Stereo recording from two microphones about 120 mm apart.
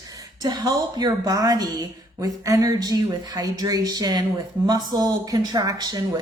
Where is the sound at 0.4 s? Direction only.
35° right (ahead or behind).